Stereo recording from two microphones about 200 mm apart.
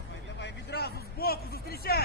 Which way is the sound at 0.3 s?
55° left (ahead or behind).